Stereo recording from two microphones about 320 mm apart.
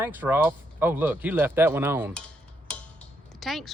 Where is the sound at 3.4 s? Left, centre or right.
Centre.